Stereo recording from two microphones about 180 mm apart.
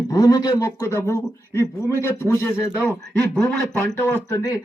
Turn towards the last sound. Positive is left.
turn(degrees=15)  # may be behind; listen again after turning